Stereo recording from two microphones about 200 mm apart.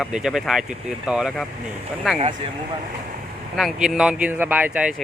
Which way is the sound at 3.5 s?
Centre (ahead or behind).